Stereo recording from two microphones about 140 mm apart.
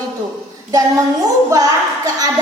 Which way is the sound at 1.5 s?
25° right (ahead or behind).